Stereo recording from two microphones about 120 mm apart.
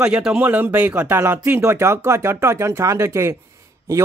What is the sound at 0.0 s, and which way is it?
Speech, 10° right (ahead or behind).